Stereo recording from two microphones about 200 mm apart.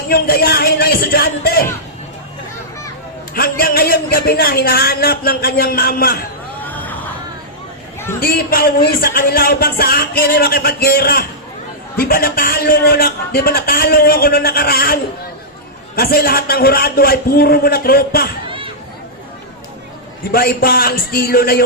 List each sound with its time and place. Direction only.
0.1 s speech: 50° left (ahead or behind)
3.3 s speech: 50° left (ahead or behind)
6.7 s vehicle: 10° left (ahead or behind)
8.2 s speech: 50° left (ahead or behind)
16.0 s speech: 50° left (ahead or behind)
18.4 s chatter: 25° right (ahead or behind)
20.3 s speech: 50° left (ahead or behind)